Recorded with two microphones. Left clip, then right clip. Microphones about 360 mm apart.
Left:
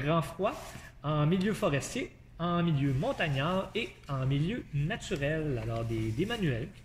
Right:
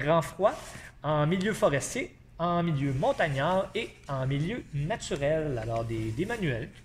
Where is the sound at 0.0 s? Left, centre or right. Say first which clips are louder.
Right 6 dB; centre.